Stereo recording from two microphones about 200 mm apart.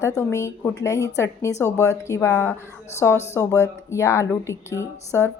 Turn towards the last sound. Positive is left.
turn(degrees=15)  # may be behind; listen again after turning